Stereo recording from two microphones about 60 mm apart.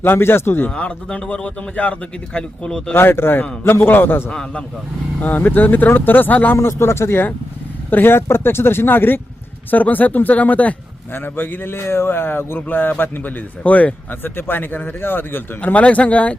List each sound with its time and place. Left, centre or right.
0.0 s a man's voice: left
0.8 s a man's voice: centre
2.9 s a man's voice: left
4.3 s a man's voice: centre
5.2 s a man's voice: left
6.6 s a man's voice: left
11.1 s a man's voice: left
15.6 s a man's voice: left